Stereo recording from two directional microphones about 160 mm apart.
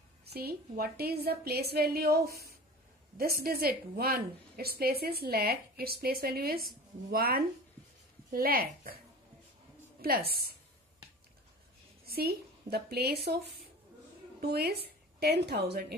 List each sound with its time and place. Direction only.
0.3 s a woman's voice: 75° right (ahead or behind)
10.0 s a woman's voice: 70° right (ahead or behind)
12.1 s a woman's voice: 75° right (ahead or behind)